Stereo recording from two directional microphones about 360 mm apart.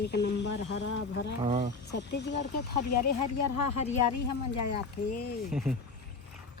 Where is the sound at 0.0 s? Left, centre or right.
Left.